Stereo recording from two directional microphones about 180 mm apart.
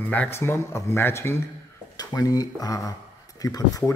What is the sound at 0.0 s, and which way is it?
A man's voice, 10° left (ahead or behind).